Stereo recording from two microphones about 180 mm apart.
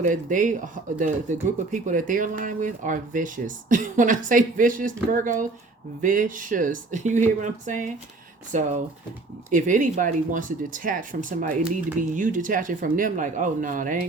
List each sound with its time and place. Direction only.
0.0 s speech: 45° right (ahead or behind)